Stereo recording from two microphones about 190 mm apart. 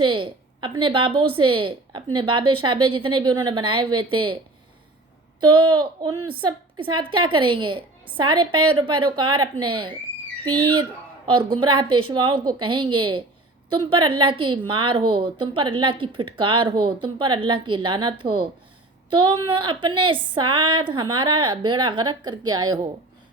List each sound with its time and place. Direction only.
0.0 s a woman's voice: 25° right (ahead or behind)
5.4 s a woman's voice: 25° right (ahead or behind)